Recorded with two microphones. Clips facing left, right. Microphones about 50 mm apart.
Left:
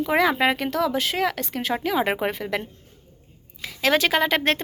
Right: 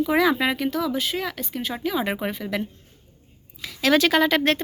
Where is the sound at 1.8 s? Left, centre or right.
Left.